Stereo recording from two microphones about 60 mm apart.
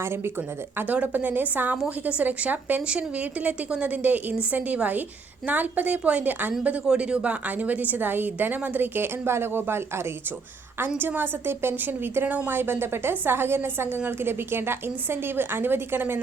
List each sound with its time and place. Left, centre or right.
0.0 s a woman's voice: right
0.9 s a woman's voice: right
10.8 s a woman's voice: right